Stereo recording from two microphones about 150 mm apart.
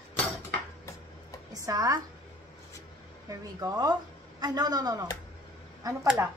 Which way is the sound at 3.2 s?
25° right (ahead or behind).